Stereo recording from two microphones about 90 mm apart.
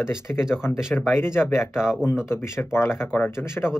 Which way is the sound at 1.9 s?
5° right (ahead or behind).